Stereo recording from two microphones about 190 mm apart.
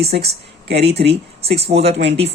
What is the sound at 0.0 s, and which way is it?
Speech, 55° right (ahead or behind).